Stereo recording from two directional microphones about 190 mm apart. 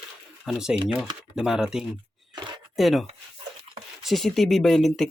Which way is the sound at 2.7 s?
Centre (ahead or behind).